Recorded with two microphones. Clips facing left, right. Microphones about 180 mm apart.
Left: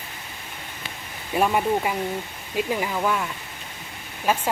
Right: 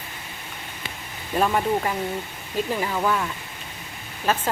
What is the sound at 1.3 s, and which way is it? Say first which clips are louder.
Speech: even; 10° left (ahead or behind).